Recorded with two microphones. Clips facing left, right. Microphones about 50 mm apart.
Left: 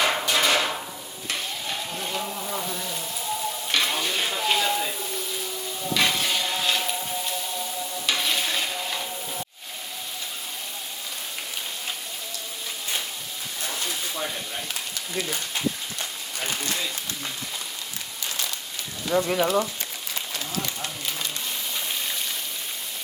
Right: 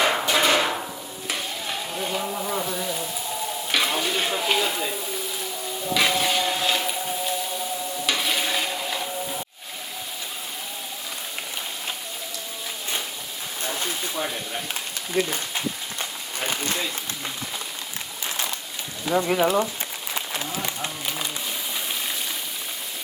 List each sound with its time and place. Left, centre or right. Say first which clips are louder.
0.0 s hammer: right 2 dB; centre
1.3 s stir: right 1 dB; centre
5.9 s music: right 2 dB; centre
8.0 s stir: right 1 dB; centre
19.0 s speech: right 2 dB; centre
20.1 s run: right 2 dB; right